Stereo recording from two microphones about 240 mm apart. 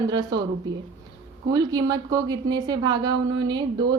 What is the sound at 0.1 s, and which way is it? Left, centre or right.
Speech, centre.